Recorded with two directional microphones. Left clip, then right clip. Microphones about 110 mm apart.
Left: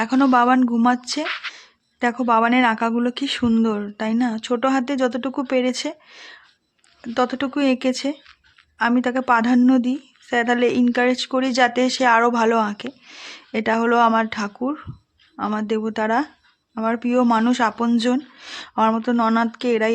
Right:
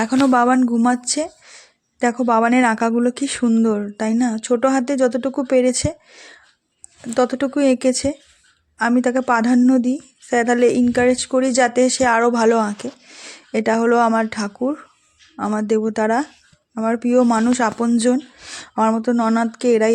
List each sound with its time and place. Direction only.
0.3 s speech: 25° right (ahead or behind)
3.9 s speech: 40° right (ahead or behind)
7.0 s speech: 30° right (ahead or behind)
9.6 s speech: 20° right (ahead or behind)
9.8 s speech: 35° right (ahead or behind)
14.6 s speech: 20° right (ahead or behind)
15.5 s speech: 35° right (ahead or behind)
17.2 s speech: 20° right (ahead or behind)
17.5 s speech: 30° right (ahead or behind)
18.7 s speech: 20° right (ahead or behind)
19.4 s speech: 35° right (ahead or behind)